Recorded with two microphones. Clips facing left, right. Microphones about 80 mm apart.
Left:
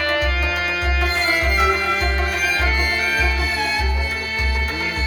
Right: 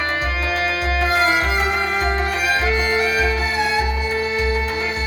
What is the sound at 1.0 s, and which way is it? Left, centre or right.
Music, right.